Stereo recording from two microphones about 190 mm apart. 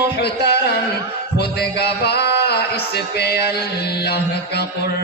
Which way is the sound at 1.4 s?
55° left (ahead or behind).